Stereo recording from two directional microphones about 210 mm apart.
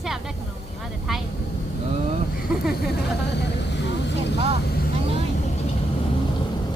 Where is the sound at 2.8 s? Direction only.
55° left (ahead or behind).